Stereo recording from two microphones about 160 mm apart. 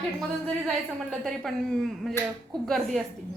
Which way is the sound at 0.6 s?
5° left (ahead or behind).